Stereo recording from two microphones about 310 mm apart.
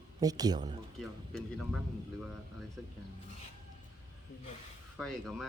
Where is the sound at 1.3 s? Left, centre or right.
Centre.